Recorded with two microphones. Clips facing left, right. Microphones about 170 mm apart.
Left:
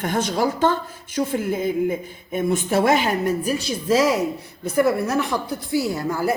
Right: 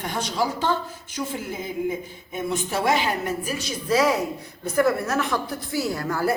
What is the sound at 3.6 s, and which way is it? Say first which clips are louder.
Speech: left 3 dB; 30° left (ahead or behind).